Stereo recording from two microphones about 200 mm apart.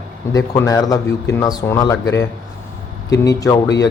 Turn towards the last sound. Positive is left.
turn(degrees=15)  # may be behind; listen again after turning